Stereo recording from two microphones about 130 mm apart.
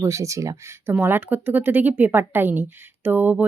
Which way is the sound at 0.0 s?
25° right (ahead or behind).